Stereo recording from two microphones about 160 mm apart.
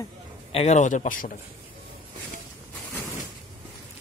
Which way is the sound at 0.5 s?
40° left (ahead or behind).